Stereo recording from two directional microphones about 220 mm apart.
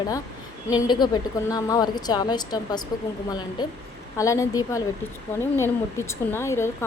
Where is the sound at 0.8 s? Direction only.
20° left (ahead or behind).